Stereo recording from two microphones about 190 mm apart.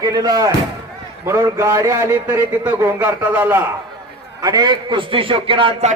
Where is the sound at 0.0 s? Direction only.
20° right (ahead or behind).